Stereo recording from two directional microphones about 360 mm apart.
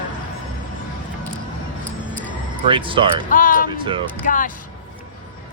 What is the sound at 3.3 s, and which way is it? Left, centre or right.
Speech, left.